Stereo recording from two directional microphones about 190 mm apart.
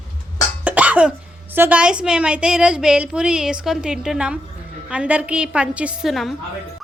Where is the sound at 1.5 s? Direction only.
10° right (ahead or behind).